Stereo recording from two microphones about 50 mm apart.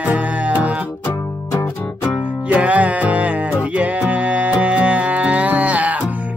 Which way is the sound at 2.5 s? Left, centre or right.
Right.